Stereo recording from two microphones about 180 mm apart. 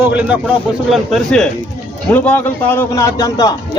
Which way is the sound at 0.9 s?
Centre (ahead or behind).